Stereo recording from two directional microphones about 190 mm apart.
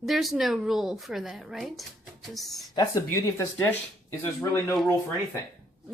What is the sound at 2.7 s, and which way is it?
Speech, 20° left (ahead or behind).